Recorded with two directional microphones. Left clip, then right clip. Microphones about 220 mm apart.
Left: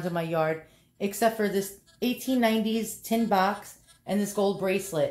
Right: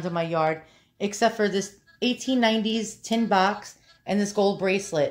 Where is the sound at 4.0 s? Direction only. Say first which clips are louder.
Right 4 dB; 25° right (ahead or behind).